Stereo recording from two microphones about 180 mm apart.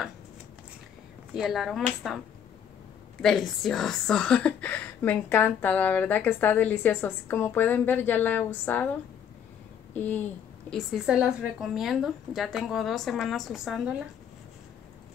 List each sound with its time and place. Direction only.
1.3 s a woman's voice: centre (ahead or behind)
3.2 s a woman's voice: centre (ahead or behind)
9.9 s a woman's voice: 10° left (ahead or behind)
10.7 s a woman's voice: centre (ahead or behind)